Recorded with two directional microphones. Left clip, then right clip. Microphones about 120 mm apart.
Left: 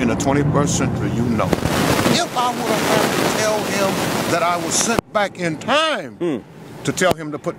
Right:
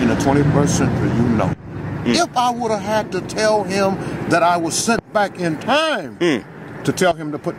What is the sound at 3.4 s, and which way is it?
Speech, 5° left (ahead or behind).